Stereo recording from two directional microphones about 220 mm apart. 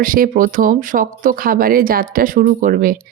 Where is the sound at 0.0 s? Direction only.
40° right (ahead or behind).